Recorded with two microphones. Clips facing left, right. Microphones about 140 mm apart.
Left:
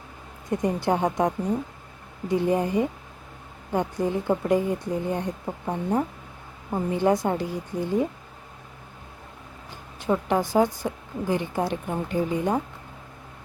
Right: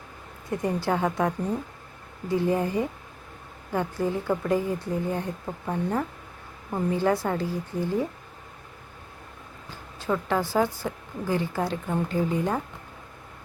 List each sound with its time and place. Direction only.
0.5 s a woman's voice: 20° left (ahead or behind)
9.6 s a woman's voice: 20° left (ahead or behind)